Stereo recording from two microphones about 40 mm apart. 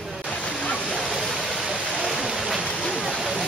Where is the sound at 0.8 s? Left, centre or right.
Centre.